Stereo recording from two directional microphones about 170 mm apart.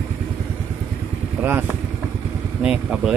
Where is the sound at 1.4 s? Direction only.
10° right (ahead or behind).